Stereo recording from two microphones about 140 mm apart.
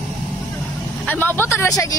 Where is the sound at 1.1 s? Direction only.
15° left (ahead or behind).